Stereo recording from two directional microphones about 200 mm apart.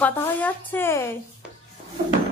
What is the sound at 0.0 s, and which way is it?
A woman's voice, 10° left (ahead or behind).